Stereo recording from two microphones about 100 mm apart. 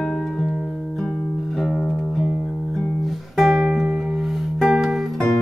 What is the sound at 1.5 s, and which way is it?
Music, centre (ahead or behind).